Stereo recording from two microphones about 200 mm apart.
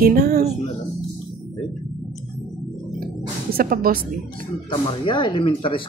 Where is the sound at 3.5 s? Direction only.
50° right (ahead or behind).